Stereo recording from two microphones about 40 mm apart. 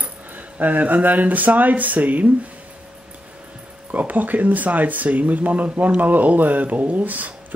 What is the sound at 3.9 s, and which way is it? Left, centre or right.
Speech, right.